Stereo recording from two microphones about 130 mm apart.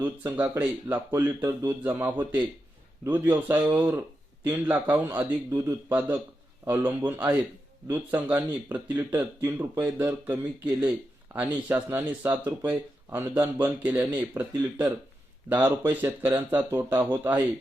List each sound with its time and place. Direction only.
0.0 s speech: 15° right (ahead or behind)